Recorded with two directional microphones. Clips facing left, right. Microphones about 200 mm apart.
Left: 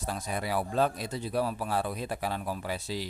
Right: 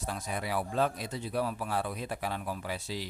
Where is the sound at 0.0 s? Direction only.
35° left (ahead or behind).